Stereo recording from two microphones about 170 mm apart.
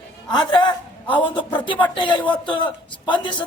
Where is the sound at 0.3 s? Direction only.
25° left (ahead or behind).